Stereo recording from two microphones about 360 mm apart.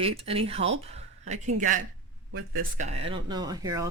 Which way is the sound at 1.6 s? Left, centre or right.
Right.